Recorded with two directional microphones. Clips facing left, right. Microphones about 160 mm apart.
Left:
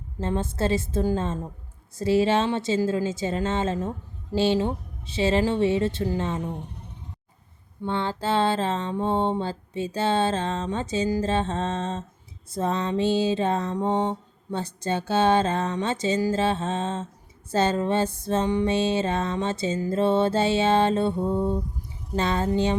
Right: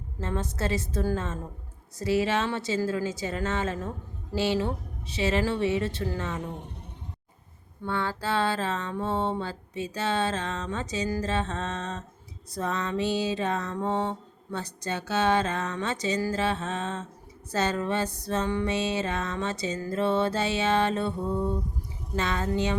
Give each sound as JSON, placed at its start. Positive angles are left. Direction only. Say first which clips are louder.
{"t": 0.2, "sound": "music", "louder": "left 5 dB", "side_deg": 30}
{"t": 7.9, "sound": "music", "louder": "left 3 dB", "side_deg": 25}
{"t": 22.1, "sound": "speech", "louder": "left 4 dB", "side_deg": 30}